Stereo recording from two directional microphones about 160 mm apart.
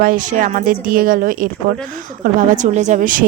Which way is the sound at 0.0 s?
60° right (ahead or behind).